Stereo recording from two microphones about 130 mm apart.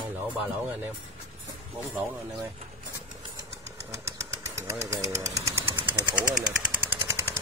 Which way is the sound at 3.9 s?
20° right (ahead or behind).